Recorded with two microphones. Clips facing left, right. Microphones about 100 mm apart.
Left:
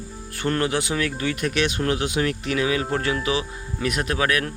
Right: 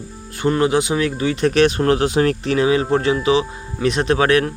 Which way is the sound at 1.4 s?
35° right (ahead or behind).